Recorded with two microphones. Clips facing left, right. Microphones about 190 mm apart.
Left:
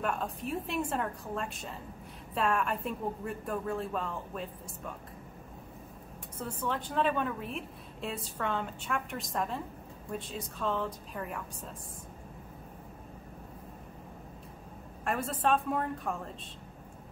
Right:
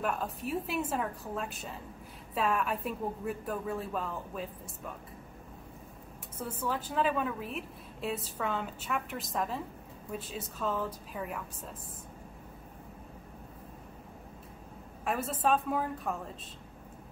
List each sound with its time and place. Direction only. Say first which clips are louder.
0.0 s a woman's voice: even; centre (ahead or behind)
6.3 s a woman's voice: even; 5° right (ahead or behind)
15.0 s a woman's voice: even; centre (ahead or behind)